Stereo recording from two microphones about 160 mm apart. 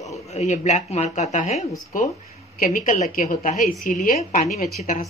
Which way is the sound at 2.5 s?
55° left (ahead or behind).